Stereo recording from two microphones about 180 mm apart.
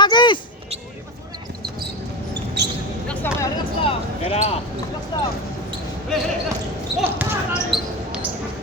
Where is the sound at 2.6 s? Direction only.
70° right (ahead or behind).